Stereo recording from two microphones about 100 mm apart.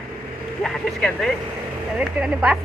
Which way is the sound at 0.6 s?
5° left (ahead or behind).